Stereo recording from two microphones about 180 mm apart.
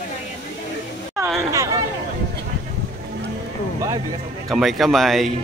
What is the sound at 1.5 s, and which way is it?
Chatter, 20° right (ahead or behind).